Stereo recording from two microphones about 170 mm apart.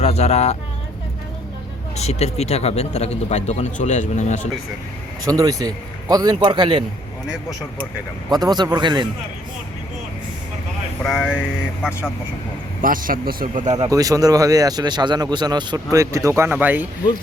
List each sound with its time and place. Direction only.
0.0 s speech: 40° left (ahead or behind)
2.0 s speech: 40° left (ahead or behind)
5.2 s a man's voice: 20° right (ahead or behind)
8.3 s a man's voice: 25° right (ahead or behind)
11.0 s speech: 5° right (ahead or behind)
12.8 s speech: 55° right (ahead or behind)
13.9 s a man's voice: 20° right (ahead or behind)